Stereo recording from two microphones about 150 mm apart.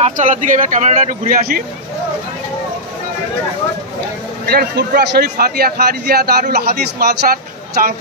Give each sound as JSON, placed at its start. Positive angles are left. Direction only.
{"t": 0.0, "sound": "speech", "side_deg": -55}
{"t": 4.5, "sound": "a man's voice", "side_deg": -90}